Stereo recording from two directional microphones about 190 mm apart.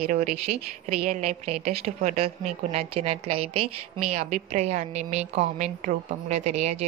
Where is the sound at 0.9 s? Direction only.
35° right (ahead or behind).